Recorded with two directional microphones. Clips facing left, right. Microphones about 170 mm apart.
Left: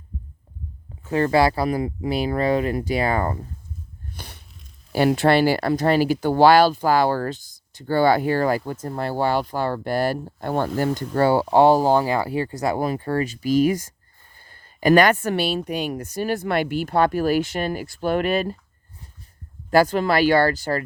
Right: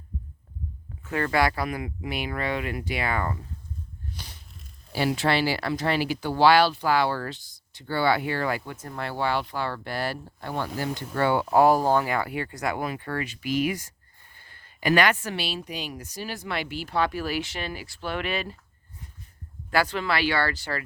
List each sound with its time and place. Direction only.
1.0 s speech: 35° left (ahead or behind)
4.1 s a sound: 55° left (ahead or behind)
4.9 s speech: 55° left (ahead or behind)
11.1 s speech: 35° left (ahead or behind)
19.7 s speech: 45° left (ahead or behind)